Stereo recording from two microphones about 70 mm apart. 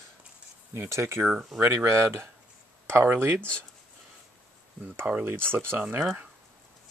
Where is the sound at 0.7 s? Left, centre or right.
Right.